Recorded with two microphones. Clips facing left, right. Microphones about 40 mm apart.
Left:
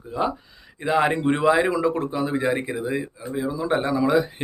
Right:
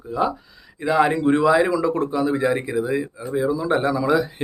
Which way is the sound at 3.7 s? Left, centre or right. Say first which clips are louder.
Left 1 dB; centre.